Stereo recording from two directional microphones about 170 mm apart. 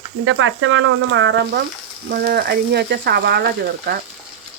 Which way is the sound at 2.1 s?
70° right (ahead or behind).